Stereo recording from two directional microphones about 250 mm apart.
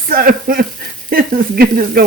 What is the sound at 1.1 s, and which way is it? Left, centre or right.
Speech, right.